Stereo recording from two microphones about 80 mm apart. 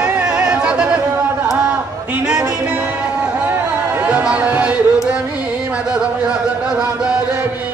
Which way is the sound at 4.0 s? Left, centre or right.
Centre.